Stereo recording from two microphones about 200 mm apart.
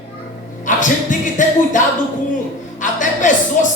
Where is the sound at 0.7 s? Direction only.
40° left (ahead or behind).